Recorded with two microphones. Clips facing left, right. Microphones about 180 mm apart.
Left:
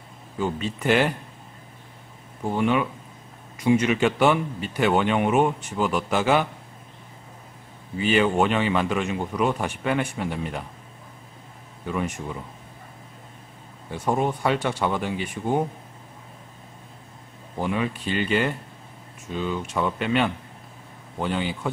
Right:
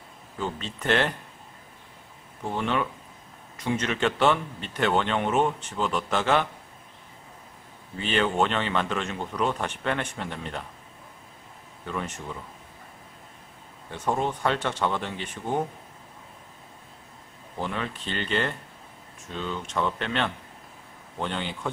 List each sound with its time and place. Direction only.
0.4 s speech: 10° left (ahead or behind)
2.4 s speech: 10° left (ahead or behind)
7.9 s speech: 10° left (ahead or behind)
11.8 s speech: 10° left (ahead or behind)
13.8 s speech: 10° left (ahead or behind)
17.6 s a man's voice: 10° left (ahead or behind)